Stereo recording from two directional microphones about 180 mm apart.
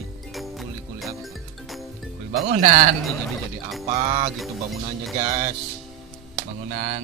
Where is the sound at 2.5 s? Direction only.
40° right (ahead or behind).